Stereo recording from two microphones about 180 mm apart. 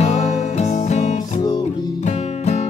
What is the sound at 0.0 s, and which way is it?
Music, 35° left (ahead or behind).